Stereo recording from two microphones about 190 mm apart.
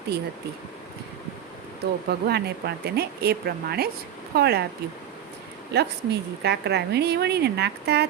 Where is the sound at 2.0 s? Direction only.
60° right (ahead or behind).